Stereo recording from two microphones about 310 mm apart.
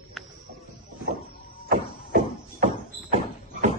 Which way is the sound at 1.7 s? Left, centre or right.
Right.